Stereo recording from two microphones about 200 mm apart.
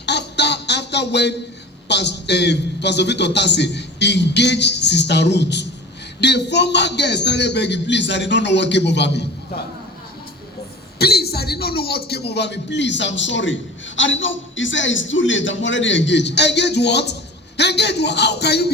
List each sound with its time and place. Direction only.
0.0 s a sound: 60° left (ahead or behind)
1.9 s a man's voice: 60° left (ahead or behind)
10.9 s a man's voice: 55° left (ahead or behind)